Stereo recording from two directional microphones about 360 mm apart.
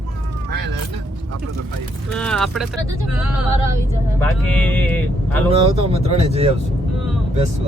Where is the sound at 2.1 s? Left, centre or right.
Centre.